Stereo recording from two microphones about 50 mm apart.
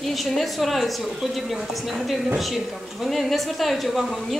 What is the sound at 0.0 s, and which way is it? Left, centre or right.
Speech, centre.